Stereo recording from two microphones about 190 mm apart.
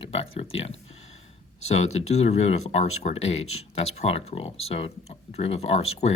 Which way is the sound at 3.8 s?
35° left (ahead or behind).